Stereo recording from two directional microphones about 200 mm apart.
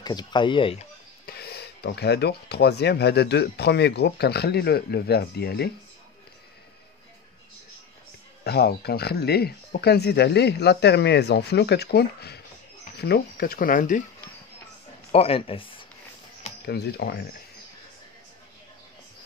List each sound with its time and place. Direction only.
0.0 s speech: 20° left (ahead or behind)
1.2 s speech: 55° left (ahead or behind)
8.5 s speech: 55° left (ahead or behind)
15.0 s speech: 30° left (ahead or behind)
16.6 s speech: 55° left (ahead or behind)